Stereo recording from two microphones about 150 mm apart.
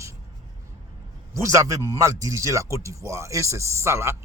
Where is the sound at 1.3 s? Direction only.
20° right (ahead or behind).